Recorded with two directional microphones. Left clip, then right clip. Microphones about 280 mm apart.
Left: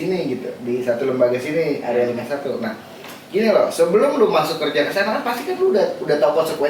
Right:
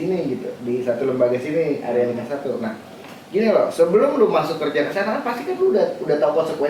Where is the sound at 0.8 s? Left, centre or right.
Centre.